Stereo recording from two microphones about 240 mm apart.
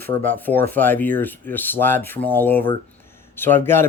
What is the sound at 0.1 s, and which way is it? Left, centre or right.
Speech, centre.